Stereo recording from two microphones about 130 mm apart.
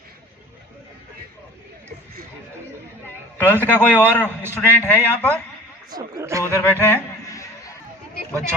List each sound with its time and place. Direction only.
3.3 s a man's voice: 15° left (ahead or behind)
5.9 s speech: 25° right (ahead or behind)
6.4 s a sound: 15° left (ahead or behind)